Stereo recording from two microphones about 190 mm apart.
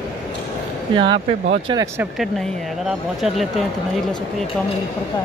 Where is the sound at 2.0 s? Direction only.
Centre (ahead or behind).